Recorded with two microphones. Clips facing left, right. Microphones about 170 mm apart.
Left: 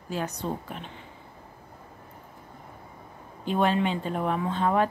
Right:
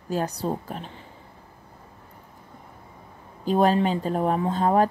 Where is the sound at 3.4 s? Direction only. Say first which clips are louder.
Right 4 dB; 40° right (ahead or behind).